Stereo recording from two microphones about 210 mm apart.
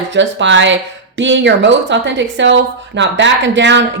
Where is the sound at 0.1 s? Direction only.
60° right (ahead or behind).